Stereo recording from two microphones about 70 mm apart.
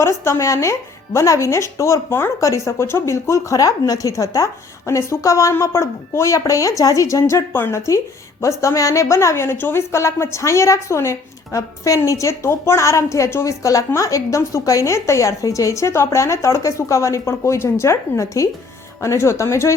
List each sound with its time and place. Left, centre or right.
0.0 s a woman's voice: left
2.4 s a woman's voice: left